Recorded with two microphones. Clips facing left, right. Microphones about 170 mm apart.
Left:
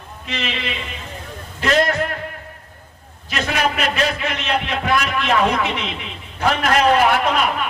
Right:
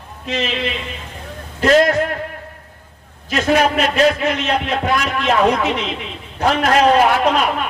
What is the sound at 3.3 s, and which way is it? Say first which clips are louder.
A man's voice: right 6 dB; 40° right (ahead or behind).